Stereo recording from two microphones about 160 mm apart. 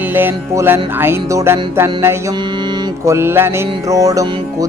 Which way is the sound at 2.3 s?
30° right (ahead or behind).